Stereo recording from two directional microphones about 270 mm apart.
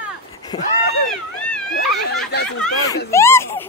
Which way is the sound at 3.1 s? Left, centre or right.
Centre.